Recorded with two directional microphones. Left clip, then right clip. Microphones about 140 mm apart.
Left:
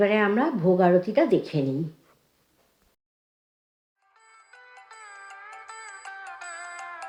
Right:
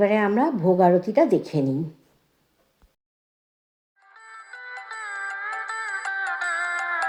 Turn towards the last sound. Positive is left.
turn(degrees=-40)  # may be behind; listen again after turning